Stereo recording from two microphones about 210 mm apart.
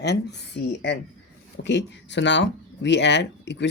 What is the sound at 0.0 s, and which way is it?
A woman's voice, 55° left (ahead or behind).